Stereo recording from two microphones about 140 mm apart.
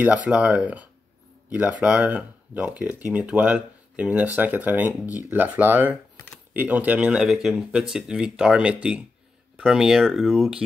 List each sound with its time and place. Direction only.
0.3 s speech: 10° right (ahead or behind)